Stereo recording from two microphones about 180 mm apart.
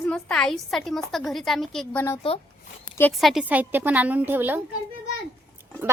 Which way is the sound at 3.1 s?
Centre (ahead or behind).